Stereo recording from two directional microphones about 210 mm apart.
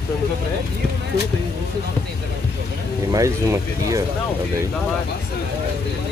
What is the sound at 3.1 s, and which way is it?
Speech, 15° right (ahead or behind).